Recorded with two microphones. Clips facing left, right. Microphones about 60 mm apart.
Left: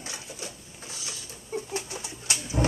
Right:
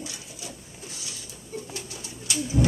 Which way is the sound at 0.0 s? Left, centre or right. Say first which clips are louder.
Left 1 dB; left.